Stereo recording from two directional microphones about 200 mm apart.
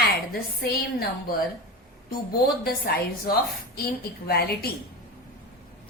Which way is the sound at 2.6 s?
50° left (ahead or behind).